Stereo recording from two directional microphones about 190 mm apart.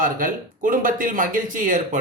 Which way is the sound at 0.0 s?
45° right (ahead or behind).